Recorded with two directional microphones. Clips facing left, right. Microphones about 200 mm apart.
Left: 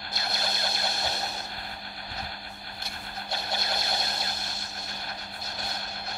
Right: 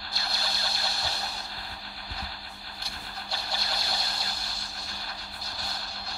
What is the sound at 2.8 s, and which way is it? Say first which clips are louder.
Vehicle: left 2 dB; 20° left (ahead or behind).